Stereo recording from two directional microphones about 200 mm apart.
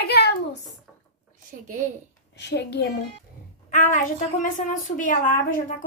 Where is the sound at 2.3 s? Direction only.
60° left (ahead or behind).